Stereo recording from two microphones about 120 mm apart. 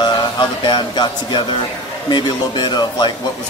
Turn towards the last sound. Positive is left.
turn(degrees=40)  # may be behind; listen again after turning